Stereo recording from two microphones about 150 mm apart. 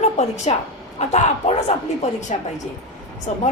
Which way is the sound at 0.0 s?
50° left (ahead or behind).